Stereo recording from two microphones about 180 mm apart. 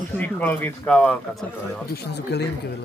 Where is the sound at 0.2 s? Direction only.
10° left (ahead or behind).